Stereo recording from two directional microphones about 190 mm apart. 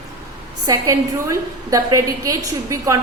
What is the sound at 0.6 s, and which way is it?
A woman's voice, 20° right (ahead or behind).